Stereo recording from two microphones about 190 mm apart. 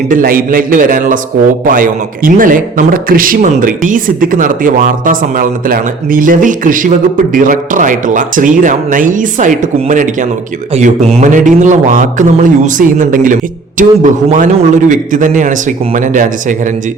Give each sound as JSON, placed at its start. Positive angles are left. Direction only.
{"t": 0.1, "sound": "a man's voice", "side_deg": -50}